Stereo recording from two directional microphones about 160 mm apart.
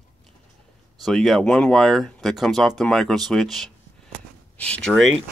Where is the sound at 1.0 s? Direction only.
Centre (ahead or behind).